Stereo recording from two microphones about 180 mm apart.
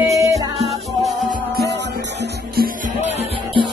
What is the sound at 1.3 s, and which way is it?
Music, 60° right (ahead or behind).